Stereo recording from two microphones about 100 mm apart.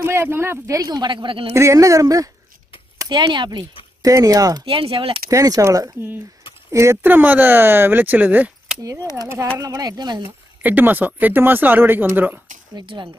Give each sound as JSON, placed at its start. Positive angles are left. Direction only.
{"t": 0.0, "sound": "speech", "side_deg": -25}
{"t": 1.5, "sound": "speech", "side_deg": -30}
{"t": 3.1, "sound": "speech", "side_deg": -50}
{"t": 4.6, "sound": "speech", "side_deg": -60}
{"t": 5.3, "sound": "speech", "side_deg": -35}
{"t": 9.6, "sound": "speech", "side_deg": -40}
{"t": 10.6, "sound": "speech", "side_deg": -20}
{"t": 12.7, "sound": "speech", "side_deg": -50}